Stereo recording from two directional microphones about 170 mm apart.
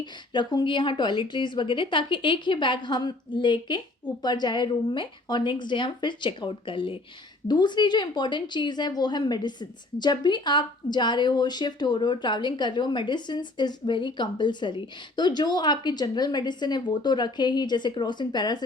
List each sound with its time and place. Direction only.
0.0 s a woman's voice: 25° left (ahead or behind)